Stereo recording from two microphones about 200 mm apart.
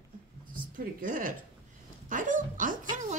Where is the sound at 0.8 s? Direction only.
45° right (ahead or behind).